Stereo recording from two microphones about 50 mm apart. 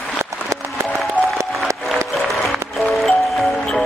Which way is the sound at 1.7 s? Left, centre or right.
Right.